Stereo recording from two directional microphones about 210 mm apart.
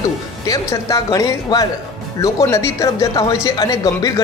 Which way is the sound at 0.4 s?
15° left (ahead or behind).